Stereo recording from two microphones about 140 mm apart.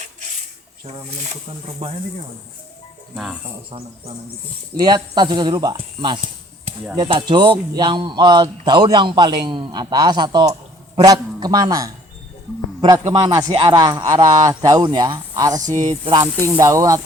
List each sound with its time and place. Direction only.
0.9 s speech: 50° right (ahead or behind)
4.8 s speech: 30° right (ahead or behind)
13.1 s speech: 30° right (ahead or behind)